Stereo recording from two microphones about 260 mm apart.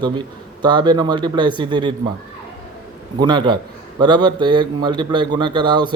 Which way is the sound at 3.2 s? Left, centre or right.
Centre.